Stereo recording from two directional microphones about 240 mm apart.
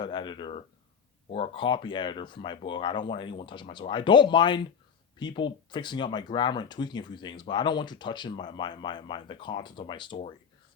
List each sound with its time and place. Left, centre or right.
0.0 s speech: centre